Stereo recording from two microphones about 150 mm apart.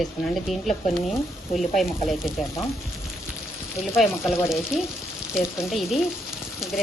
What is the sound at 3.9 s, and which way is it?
A woman's voice, centre (ahead or behind).